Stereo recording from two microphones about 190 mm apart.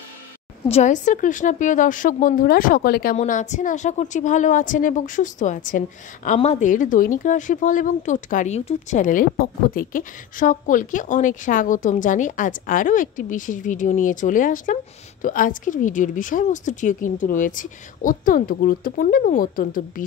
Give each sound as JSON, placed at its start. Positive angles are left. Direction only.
{"t": 0.7, "sound": "a woman's voice", "side_deg": 35}
{"t": 3.2, "sound": "a woman's voice", "side_deg": 40}